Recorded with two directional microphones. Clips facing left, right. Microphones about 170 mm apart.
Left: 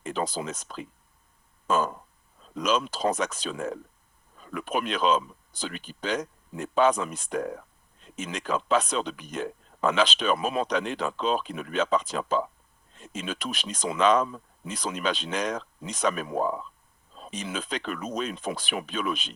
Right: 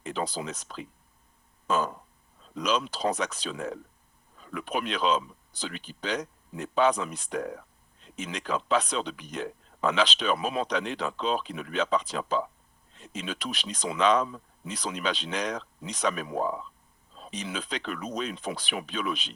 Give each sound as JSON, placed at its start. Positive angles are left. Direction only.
{"t": 0.0, "sound": "speech", "side_deg": 45}
{"t": 1.6, "sound": "a sound", "side_deg": 45}
{"t": 2.6, "sound": "speech", "side_deg": 45}